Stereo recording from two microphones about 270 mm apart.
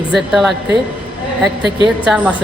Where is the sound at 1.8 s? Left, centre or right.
Centre.